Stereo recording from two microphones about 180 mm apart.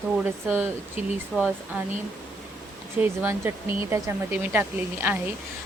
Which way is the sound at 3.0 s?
10° right (ahead or behind).